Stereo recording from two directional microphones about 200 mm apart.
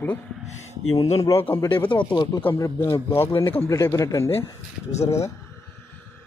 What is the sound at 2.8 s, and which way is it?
Speech, 10° left (ahead or behind).